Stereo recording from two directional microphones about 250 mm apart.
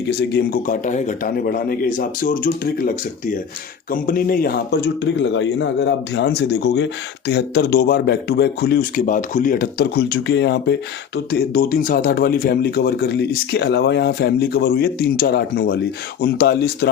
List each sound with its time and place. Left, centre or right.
0.2 s speech: left